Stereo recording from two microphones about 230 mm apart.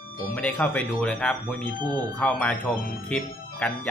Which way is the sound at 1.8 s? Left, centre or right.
Centre.